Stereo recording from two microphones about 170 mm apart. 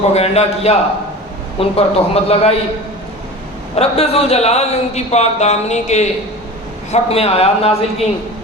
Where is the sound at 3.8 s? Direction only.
35° left (ahead or behind).